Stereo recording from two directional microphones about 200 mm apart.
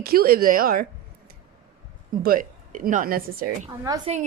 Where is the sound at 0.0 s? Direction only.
50° right (ahead or behind).